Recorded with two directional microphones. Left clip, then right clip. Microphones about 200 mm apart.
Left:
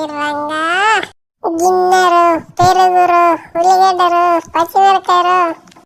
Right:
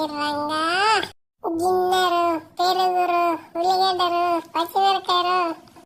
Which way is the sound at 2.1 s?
90° left.